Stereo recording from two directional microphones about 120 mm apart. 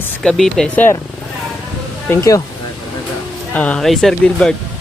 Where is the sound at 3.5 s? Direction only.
10° left (ahead or behind).